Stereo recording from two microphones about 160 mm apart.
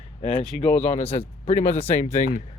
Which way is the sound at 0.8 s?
40° left (ahead or behind).